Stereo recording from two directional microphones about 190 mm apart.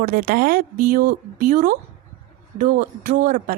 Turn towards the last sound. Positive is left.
turn(degrees=-45)  # may be behind; listen again after turning